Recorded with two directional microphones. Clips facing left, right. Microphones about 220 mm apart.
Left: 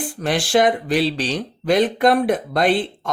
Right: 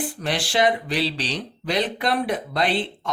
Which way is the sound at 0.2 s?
50° left (ahead or behind).